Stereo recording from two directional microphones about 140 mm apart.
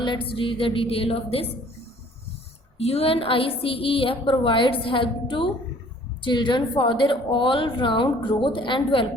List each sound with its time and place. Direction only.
0.0 s a woman's voice: 35° left (ahead or behind)
2.7 s a woman's voice: 45° left (ahead or behind)